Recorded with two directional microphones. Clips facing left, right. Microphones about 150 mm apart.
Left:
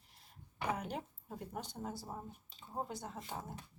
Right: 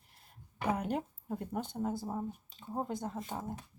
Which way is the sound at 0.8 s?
50° right (ahead or behind).